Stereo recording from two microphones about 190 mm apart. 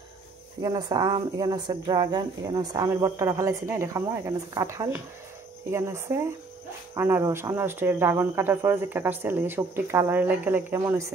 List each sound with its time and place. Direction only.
0.6 s speech: 20° right (ahead or behind)